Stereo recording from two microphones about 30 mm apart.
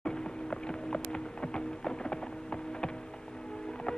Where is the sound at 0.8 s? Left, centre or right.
Left.